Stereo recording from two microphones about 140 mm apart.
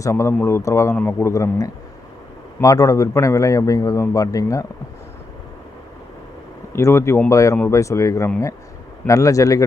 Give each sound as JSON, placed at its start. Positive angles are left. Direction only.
{"t": 0.0, "sound": "a man's voice", "side_deg": 20}
{"t": 6.7, "sound": "a man's voice", "side_deg": 20}